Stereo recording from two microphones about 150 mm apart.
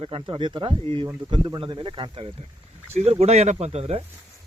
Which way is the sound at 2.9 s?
45° right (ahead or behind).